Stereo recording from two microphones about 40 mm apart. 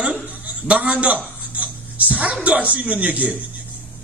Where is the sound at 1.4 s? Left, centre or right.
Right.